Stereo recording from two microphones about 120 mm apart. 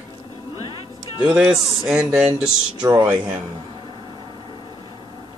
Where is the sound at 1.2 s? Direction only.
5° right (ahead or behind).